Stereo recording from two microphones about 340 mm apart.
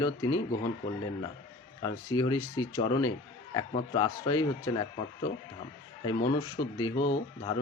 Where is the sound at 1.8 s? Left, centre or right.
Centre.